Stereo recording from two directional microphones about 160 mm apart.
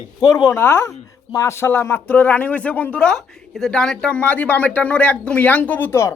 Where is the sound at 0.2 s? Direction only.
25° left (ahead or behind).